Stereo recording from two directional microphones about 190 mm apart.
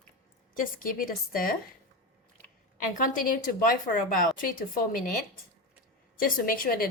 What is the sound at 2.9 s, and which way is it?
A woman's voice, 45° left (ahead or behind).